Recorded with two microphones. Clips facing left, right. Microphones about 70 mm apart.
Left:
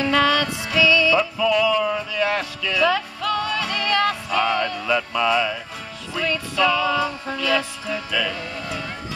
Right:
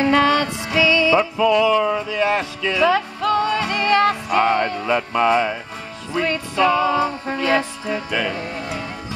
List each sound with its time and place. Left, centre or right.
0.0 s music: right
1.8 s speech: right
2.0 s music: right